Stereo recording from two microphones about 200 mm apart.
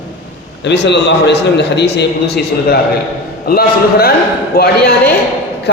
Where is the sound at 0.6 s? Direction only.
60° left (ahead or behind).